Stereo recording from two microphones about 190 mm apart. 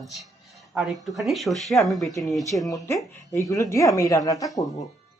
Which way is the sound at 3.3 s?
15° left (ahead or behind).